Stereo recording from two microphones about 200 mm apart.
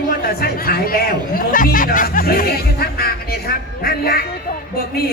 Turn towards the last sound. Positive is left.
turn(degrees=50)  # may be behind; listen again after turning